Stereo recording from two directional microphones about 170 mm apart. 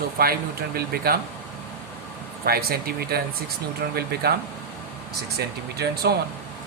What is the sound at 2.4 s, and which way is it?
Speech, 65° right (ahead or behind).